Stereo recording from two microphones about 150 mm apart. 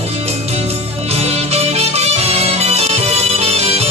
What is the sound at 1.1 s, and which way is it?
Music, 45° right (ahead or behind).